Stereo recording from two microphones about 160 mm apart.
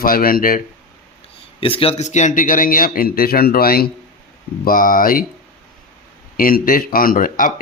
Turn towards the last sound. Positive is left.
turn(degrees=60)  # may be behind; listen again after turning